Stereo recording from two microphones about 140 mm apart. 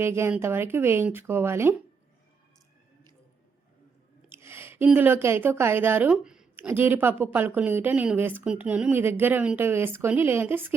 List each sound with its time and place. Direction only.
0.0 s a woman's voice: 20° right (ahead or behind)
4.3 s a sound: 20° right (ahead or behind)
4.9 s speech: 15° right (ahead or behind)
6.7 s a woman's voice: 15° right (ahead or behind)